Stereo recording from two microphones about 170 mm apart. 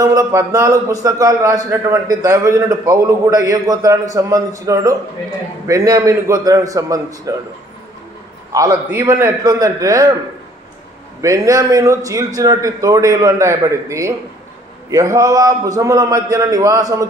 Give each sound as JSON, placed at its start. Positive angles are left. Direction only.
{"t": 0.0, "sound": "a man's voice", "side_deg": -20}
{"t": 8.5, "sound": "a man's voice", "side_deg": -20}
{"t": 11.1, "sound": "a man's voice", "side_deg": -20}